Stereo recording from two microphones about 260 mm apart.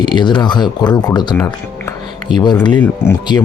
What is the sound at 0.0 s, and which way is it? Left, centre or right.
Speech, centre.